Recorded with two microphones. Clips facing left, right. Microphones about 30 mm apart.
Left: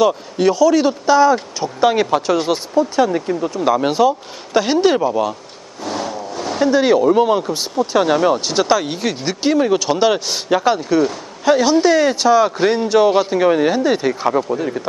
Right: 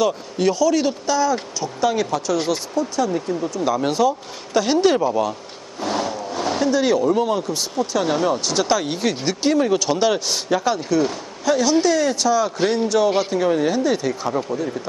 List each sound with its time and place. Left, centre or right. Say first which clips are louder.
0.0 s speech: left 4 dB; centre
1.0 s speech: left 7 dB; left
5.8 s vehicle: even; centre
6.7 s speech: left 6 dB; left